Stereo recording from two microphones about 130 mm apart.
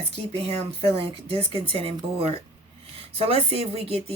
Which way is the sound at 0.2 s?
45° right (ahead or behind).